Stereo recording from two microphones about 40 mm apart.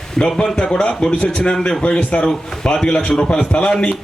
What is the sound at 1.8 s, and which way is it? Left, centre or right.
A man's voice, left.